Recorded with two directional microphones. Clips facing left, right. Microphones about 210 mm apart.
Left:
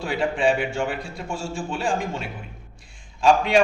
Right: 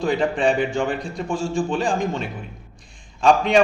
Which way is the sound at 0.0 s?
5° left (ahead or behind).